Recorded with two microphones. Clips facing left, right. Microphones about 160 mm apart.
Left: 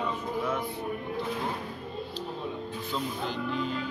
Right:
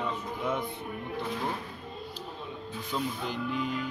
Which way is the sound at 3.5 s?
15° right (ahead or behind).